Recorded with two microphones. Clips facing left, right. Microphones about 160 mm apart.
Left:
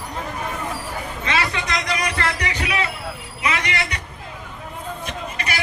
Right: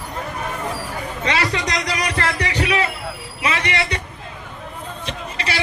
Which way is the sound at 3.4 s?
30° right (ahead or behind).